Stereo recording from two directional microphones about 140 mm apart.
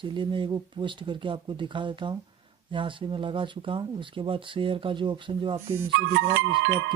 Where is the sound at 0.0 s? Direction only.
35° right (ahead or behind).